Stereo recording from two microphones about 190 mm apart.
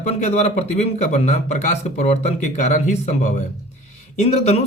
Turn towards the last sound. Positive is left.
turn(degrees=35)  # may be behind; listen again after turning